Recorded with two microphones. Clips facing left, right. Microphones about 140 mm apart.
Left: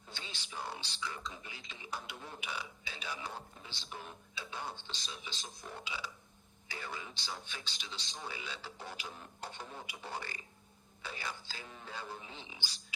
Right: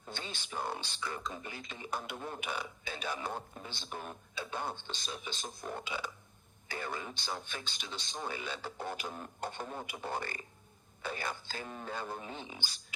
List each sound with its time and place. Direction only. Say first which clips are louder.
0.1 s speech: right 6 dB; 50° right (ahead or behind)